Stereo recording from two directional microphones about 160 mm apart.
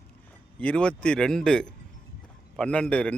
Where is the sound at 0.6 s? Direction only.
5° left (ahead or behind).